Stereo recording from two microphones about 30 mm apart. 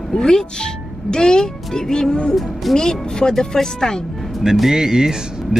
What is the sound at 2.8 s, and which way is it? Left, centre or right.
Speech, left.